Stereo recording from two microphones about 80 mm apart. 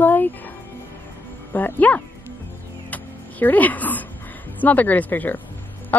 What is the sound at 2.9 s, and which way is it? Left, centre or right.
Music, left.